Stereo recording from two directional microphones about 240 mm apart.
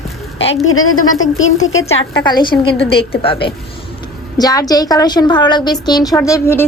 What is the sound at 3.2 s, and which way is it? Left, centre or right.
A woman's voice, left.